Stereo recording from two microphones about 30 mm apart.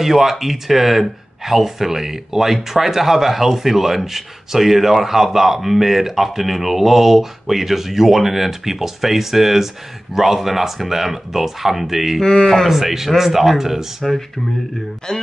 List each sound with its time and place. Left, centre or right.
0.0 s speech: centre
12.2 s speech: left
12.6 s speech: centre
15.1 s speech: left